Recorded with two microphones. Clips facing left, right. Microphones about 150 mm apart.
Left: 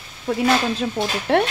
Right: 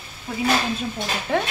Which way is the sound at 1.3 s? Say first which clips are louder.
Left 5 dB; 70° left (ahead or behind).